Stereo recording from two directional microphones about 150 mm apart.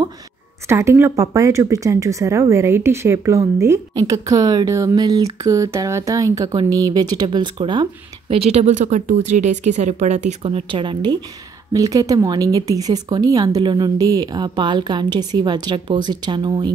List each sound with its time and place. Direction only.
0.7 s speech: 20° right (ahead or behind)